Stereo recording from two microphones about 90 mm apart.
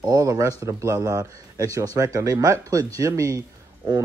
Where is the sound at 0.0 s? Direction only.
40° right (ahead or behind).